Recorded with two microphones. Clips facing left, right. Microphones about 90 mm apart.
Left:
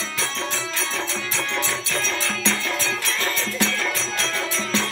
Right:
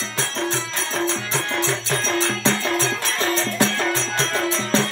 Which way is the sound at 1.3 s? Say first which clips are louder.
Even; 40° right (ahead or behind).